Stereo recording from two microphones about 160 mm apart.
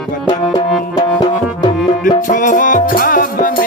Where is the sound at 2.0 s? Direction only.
55° left (ahead or behind).